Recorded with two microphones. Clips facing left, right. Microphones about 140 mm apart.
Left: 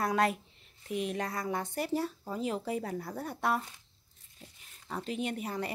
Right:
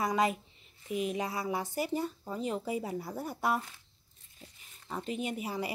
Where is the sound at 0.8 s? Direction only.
Centre (ahead or behind).